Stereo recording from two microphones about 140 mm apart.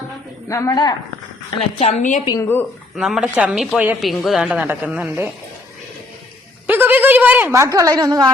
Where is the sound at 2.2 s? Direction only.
25° left (ahead or behind).